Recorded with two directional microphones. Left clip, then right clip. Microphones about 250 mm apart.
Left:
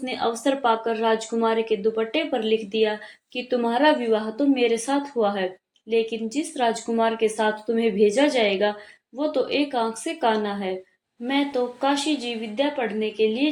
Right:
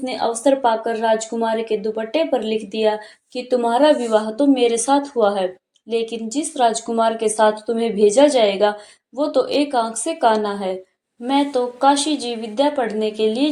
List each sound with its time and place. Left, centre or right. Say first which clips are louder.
0.0 s speech: right 5 dB; centre